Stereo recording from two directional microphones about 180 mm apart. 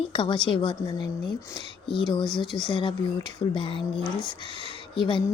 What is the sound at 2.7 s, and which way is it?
Speech, 25° left (ahead or behind).